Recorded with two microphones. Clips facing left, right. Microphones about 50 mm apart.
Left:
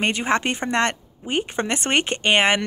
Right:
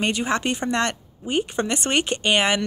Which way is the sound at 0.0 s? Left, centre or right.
Left.